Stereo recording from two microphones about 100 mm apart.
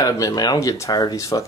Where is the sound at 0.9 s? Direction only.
40° left (ahead or behind).